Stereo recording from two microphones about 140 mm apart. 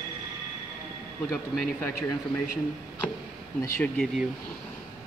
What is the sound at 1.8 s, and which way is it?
Speech, 15° left (ahead or behind).